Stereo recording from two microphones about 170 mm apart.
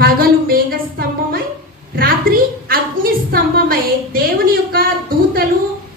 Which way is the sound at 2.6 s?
60° right (ahead or behind).